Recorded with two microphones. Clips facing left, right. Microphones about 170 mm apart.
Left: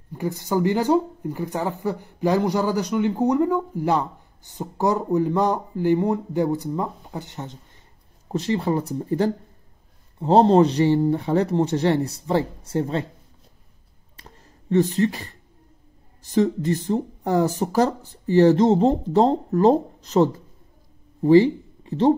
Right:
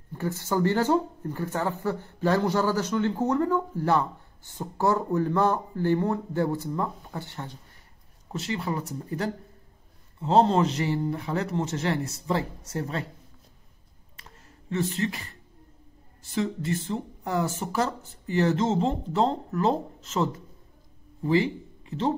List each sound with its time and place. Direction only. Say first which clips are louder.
0.1 s speech: left 4 dB; 15° left (ahead or behind)
8.3 s speech: left 8 dB; 35° left (ahead or behind)
14.7 s speech: left 8 dB; 35° left (ahead or behind)